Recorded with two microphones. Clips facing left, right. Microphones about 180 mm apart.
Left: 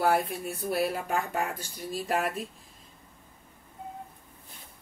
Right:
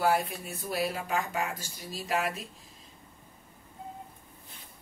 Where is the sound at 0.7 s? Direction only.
55° left (ahead or behind).